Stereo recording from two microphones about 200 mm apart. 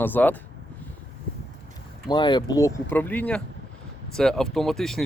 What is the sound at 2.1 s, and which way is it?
Speech, 20° left (ahead or behind).